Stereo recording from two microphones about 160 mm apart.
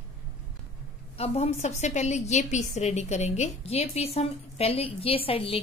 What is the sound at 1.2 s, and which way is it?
A woman's voice, 40° left (ahead or behind).